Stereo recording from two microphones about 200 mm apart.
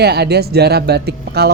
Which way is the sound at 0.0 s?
55° right (ahead or behind).